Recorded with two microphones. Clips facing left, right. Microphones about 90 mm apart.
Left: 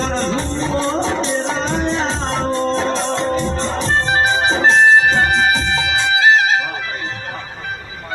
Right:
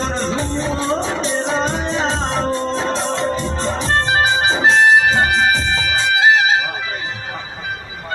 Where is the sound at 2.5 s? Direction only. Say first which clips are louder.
Left 2 dB; 5° right (ahead or behind).